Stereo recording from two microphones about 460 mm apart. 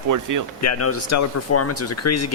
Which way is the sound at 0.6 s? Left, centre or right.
Left.